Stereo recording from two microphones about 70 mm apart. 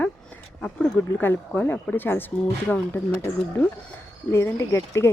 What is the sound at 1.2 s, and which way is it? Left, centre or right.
Speech, left.